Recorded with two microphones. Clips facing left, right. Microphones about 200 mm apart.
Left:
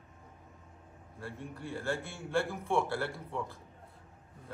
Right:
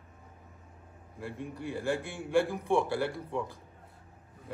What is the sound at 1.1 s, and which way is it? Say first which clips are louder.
A man's voice: right 4 dB; 15° right (ahead or behind).